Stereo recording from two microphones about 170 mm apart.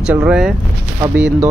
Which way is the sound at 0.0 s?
5° right (ahead or behind).